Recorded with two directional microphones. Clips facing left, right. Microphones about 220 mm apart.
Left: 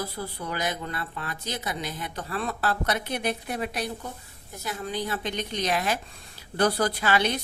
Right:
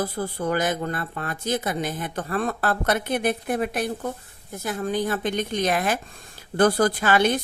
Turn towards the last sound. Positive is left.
turn(degrees=-50)  # may be behind; listen again after turning